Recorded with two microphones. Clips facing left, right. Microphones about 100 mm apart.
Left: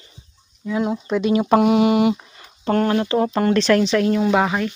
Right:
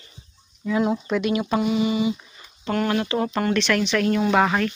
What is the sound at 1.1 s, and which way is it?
Speech, 30° left (ahead or behind).